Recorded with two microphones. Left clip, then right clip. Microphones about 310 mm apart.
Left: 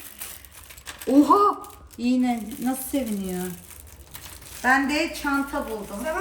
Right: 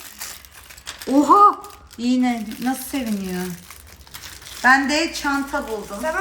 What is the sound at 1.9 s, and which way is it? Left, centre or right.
Speech, centre.